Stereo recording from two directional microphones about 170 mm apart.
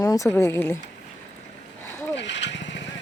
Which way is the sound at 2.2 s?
90° left.